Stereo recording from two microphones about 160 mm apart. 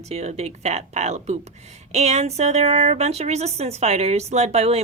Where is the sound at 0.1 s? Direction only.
45° right (ahead or behind).